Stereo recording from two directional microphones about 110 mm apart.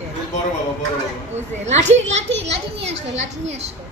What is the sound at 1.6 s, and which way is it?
A child's voice, 90° right.